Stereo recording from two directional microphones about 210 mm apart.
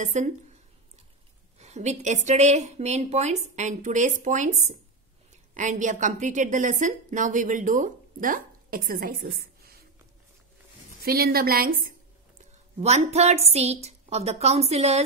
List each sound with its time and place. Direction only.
0.0 s a woman's voice: 35° right (ahead or behind)
1.6 s a woman's voice: 30° right (ahead or behind)
11.1 s a woman's voice: 45° right (ahead or behind)
12.8 s a woman's voice: 30° right (ahead or behind)